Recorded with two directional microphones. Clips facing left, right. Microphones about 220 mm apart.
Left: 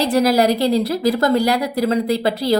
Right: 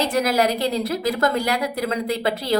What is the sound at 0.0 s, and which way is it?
A woman's voice, 35° left (ahead or behind).